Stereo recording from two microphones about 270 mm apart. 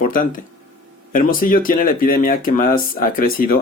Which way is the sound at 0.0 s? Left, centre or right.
Left.